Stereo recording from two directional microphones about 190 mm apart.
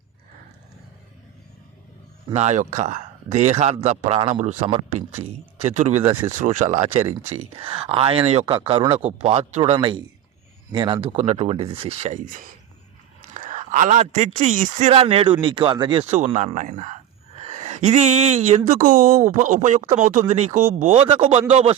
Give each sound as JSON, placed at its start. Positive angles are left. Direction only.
{"t": 2.2, "sound": "speech", "side_deg": -35}
{"t": 13.3, "sound": "a sound", "side_deg": -40}
{"t": 14.3, "sound": "speech", "side_deg": -40}